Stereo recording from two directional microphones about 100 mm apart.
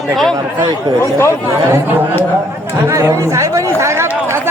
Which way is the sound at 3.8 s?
30° right (ahead or behind).